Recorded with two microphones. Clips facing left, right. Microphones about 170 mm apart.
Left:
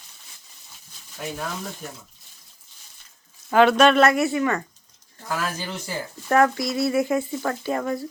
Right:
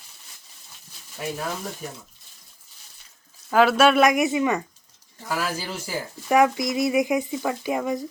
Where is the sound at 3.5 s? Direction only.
5° right (ahead or behind).